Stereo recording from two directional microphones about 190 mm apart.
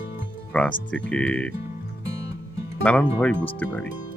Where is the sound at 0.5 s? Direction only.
5° left (ahead or behind).